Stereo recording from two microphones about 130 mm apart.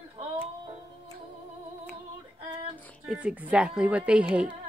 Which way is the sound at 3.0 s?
10° right (ahead or behind).